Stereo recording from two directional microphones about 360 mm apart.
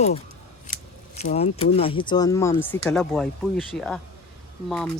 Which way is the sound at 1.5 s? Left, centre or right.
Centre.